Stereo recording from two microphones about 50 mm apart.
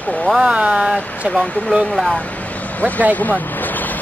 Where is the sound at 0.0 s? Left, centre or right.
Left.